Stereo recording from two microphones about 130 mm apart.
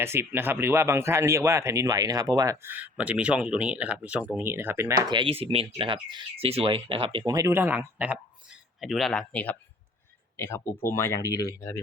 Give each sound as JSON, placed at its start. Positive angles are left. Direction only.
{"t": 0.0, "sound": "speech", "side_deg": -20}
{"t": 2.6, "sound": "speech", "side_deg": -10}
{"t": 5.1, "sound": "speech", "side_deg": -45}
{"t": 7.3, "sound": "speech", "side_deg": -25}
{"t": 8.8, "sound": "speech", "side_deg": 0}